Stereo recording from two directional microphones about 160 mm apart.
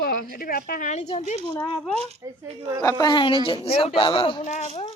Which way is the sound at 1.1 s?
45° left (ahead or behind).